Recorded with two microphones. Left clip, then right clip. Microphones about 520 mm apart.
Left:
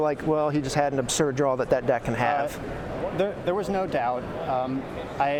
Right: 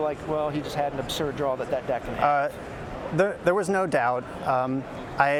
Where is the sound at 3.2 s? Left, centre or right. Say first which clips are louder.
Right 5 dB; right.